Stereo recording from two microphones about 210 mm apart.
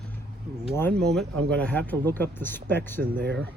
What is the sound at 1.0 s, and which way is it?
Speech, centre (ahead or behind).